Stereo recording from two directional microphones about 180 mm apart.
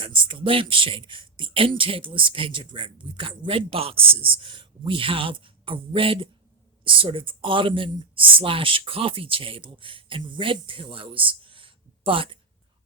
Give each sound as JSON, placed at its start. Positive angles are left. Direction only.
{"t": 0.0, "sound": "speech", "side_deg": -30}